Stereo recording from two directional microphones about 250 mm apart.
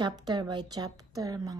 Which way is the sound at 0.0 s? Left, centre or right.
Centre.